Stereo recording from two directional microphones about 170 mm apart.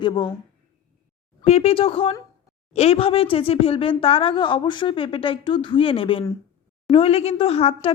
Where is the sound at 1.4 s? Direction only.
40° left (ahead or behind).